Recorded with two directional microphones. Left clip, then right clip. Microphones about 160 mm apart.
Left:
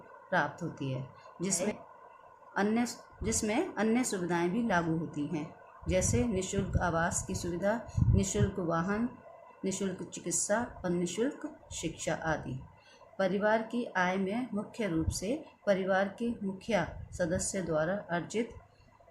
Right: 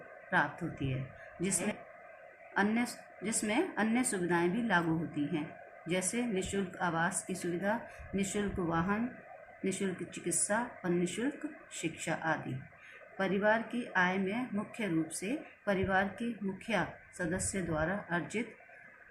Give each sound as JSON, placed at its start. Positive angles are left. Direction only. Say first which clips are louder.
{"t": 0.3, "sound": "speech", "louder": "even", "side_deg": 35}